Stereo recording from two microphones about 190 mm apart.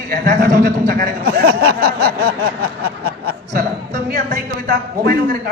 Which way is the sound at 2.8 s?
55° right (ahead or behind).